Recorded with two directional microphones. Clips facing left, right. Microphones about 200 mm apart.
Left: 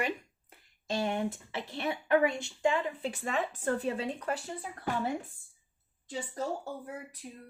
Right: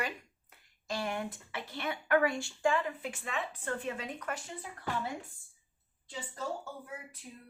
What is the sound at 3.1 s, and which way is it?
Speech, 45° left (ahead or behind).